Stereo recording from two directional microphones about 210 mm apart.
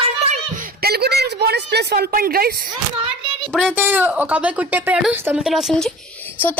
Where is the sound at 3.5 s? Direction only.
5° left (ahead or behind).